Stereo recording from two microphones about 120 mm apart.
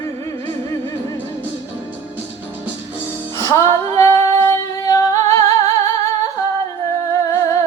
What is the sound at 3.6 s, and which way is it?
Female singing, 25° left (ahead or behind).